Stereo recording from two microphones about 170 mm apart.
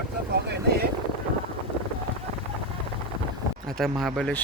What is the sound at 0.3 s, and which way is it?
Speech, 70° right (ahead or behind).